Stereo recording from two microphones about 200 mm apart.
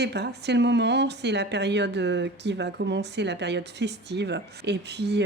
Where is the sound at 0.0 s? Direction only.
55° right (ahead or behind).